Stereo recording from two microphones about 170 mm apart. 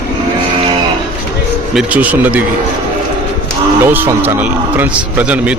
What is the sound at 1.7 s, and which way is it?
Speech, 10° right (ahead or behind).